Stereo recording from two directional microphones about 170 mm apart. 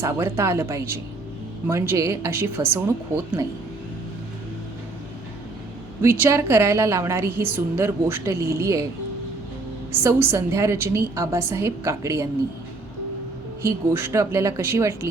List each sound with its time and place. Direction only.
0.0 s a woman's voice: 15° right (ahead or behind)
6.0 s a woman's voice: 15° right (ahead or behind)
9.9 s a woman's voice: 15° right (ahead or behind)
13.9 s a woman's voice: 15° right (ahead or behind)